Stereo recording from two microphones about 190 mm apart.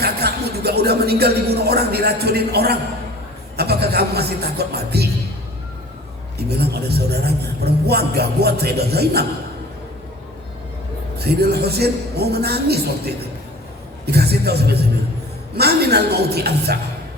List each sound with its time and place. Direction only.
0.0 s a man's voice: 55° right (ahead or behind)
6.5 s a man's voice: 55° right (ahead or behind)
11.2 s a man's voice: 55° right (ahead or behind)